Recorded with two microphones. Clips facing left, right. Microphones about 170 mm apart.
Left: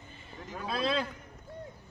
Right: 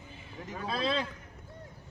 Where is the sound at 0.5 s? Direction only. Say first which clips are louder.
Left 1 dB; centre (ahead or behind).